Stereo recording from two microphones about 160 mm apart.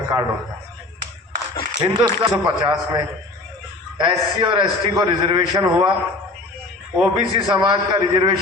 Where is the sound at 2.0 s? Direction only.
25° right (ahead or behind).